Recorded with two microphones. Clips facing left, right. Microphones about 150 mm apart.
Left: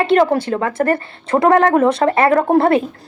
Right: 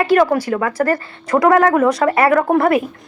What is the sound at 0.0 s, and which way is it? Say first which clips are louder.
Speech: even; 25° left (ahead or behind).